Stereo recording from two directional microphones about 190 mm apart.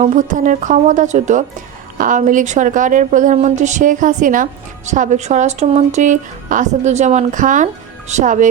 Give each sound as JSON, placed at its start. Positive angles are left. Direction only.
{"t": 0.0, "sound": "a woman's voice", "side_deg": -40}